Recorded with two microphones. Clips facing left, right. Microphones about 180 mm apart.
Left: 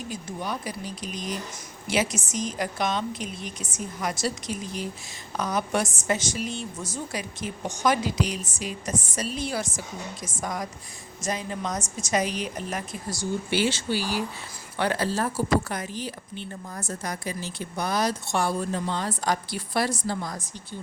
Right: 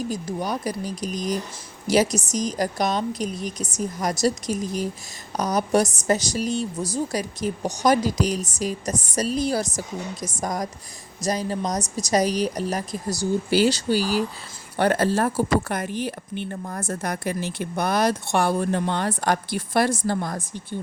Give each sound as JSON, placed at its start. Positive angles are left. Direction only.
{"t": 0.1, "sound": "a woman's voice", "side_deg": -40}